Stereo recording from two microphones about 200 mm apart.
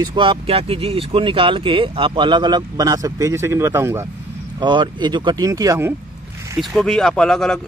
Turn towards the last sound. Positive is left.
turn(degrees=0)  # may be behind; listen again after turning